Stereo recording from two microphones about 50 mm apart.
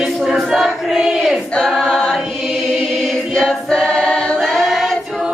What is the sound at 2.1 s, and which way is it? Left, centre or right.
Choir, centre.